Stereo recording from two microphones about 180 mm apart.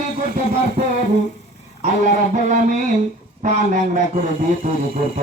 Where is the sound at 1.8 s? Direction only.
45° right (ahead or behind).